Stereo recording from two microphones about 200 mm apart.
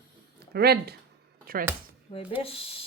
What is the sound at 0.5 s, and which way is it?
Speech, 55° right (ahead or behind).